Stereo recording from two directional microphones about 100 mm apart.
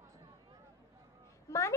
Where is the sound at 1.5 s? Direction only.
30° left (ahead or behind).